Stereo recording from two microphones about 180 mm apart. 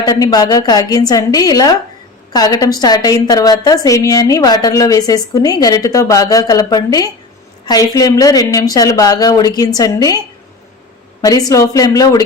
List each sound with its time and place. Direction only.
0.0 s a woman's voice: 20° left (ahead or behind)
11.2 s a woman's voice: 20° left (ahead or behind)